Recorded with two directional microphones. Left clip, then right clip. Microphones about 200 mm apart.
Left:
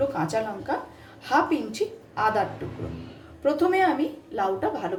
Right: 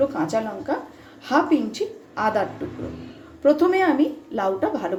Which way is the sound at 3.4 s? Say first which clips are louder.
Right 4 dB; 15° right (ahead or behind).